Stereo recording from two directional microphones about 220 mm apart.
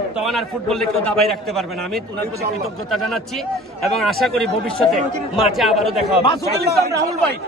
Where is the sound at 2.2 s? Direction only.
45° right (ahead or behind).